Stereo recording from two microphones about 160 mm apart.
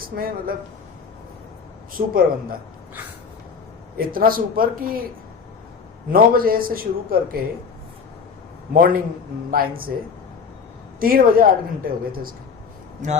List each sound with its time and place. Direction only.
0.0 s a man's voice: 65° right (ahead or behind)
2.0 s a man's voice: 65° right (ahead or behind)
3.9 s a man's voice: 65° right (ahead or behind)
6.1 s a man's voice: 65° right (ahead or behind)
8.7 s a man's voice: 60° right (ahead or behind)
11.0 s a man's voice: 65° right (ahead or behind)
13.0 s a man's voice: 50° right (ahead or behind)